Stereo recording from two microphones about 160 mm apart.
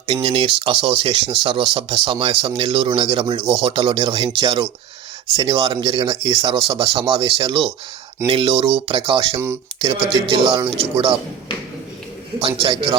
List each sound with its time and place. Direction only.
0.1 s speech: 40° right (ahead or behind)
12.4 s speech: 35° right (ahead or behind)